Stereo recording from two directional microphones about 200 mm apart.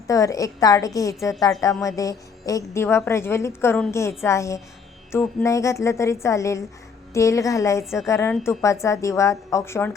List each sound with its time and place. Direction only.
0.1 s a woman's voice: 15° left (ahead or behind)